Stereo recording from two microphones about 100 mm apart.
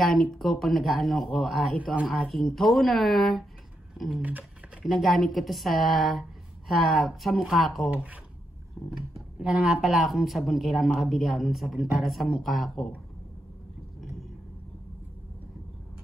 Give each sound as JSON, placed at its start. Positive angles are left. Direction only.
{"t": 0.0, "sound": "speech", "side_deg": 5}
{"t": 4.2, "sound": "speech", "side_deg": -15}
{"t": 4.8, "sound": "speech", "side_deg": 0}
{"t": 7.9, "sound": "speech", "side_deg": -15}
{"t": 8.8, "sound": "a sound", "side_deg": 0}
{"t": 9.4, "sound": "speech", "side_deg": -5}